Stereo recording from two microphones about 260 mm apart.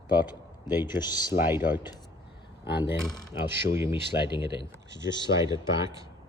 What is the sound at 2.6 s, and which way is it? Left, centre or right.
Speech, left.